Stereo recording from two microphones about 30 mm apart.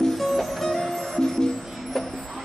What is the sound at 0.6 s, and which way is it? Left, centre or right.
Music, centre.